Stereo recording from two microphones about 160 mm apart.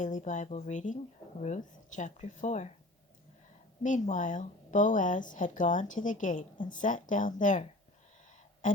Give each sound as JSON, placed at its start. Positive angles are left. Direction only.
{"t": 0.0, "sound": "a woman's voice", "side_deg": 50}
{"t": 3.8, "sound": "a woman's voice", "side_deg": 50}
{"t": 8.6, "sound": "a sound", "side_deg": 55}